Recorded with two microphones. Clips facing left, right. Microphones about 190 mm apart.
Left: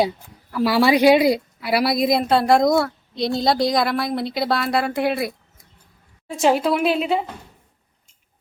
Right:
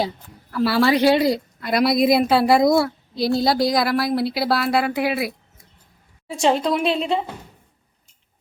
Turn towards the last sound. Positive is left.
turn(degrees=5)  # may be behind; listen again after turning